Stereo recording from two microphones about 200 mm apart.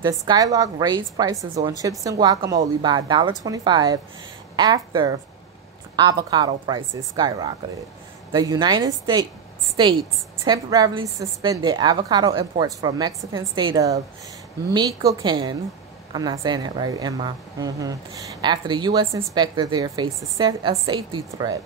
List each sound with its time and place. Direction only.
0.2 s a woman's voice: 20° right (ahead or behind)
10.4 s a woman's voice: 20° right (ahead or behind)